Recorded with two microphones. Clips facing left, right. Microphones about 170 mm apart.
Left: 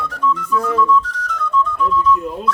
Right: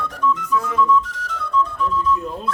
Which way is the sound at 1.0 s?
25° right (ahead or behind).